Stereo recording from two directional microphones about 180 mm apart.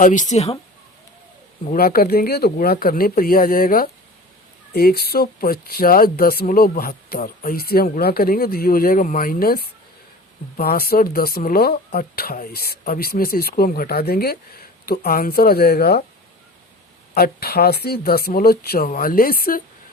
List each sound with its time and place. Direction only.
0.0 s a woman's voice: 45° left (ahead or behind)
1.7 s speech: 55° left (ahead or behind)
17.2 s speech: 55° left (ahead or behind)